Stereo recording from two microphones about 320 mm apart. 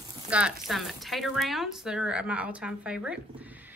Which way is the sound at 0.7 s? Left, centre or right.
Centre.